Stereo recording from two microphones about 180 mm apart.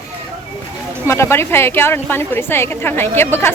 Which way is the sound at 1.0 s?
15° left (ahead or behind).